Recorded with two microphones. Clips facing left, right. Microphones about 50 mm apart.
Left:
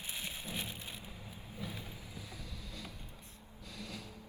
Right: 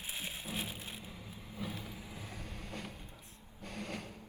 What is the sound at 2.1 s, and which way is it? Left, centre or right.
Vehicle, right.